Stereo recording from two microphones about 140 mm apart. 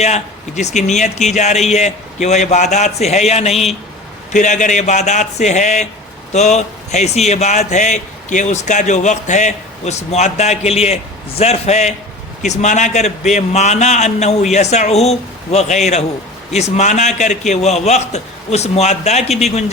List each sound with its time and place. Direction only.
0.0 s speech: 55° left (ahead or behind)
4.3 s a man's voice: 60° left (ahead or behind)